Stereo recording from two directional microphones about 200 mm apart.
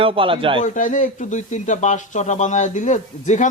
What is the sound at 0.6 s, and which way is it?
Speech, 40° left (ahead or behind).